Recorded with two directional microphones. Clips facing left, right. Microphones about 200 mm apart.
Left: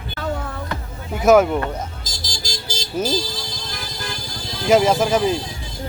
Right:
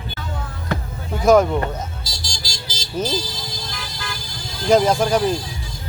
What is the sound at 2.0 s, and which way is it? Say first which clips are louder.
Vehicle: left 1 dB; 50° left (ahead or behind).